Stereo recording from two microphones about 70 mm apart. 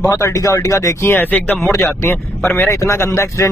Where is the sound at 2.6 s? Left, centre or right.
Left.